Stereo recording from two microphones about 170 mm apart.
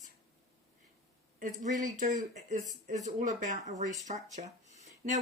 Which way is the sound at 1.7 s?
50° right (ahead or behind).